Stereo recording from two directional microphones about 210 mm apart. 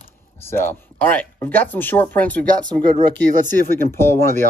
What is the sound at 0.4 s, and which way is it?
Speech, 10° left (ahead or behind).